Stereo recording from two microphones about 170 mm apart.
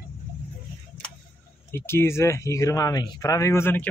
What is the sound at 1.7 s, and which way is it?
Speech, 15° left (ahead or behind).